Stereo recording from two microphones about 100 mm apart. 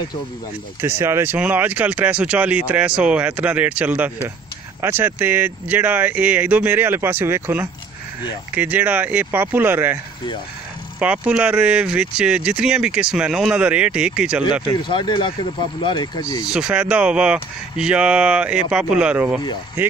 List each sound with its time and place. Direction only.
0.7 s speech: 25° right (ahead or behind)
11.0 s speech: 10° right (ahead or behind)
14.7 s speech: 50° left (ahead or behind)
16.4 s speech: 10° right (ahead or behind)